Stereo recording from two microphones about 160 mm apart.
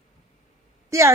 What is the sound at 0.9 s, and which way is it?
Speech, 15° right (ahead or behind).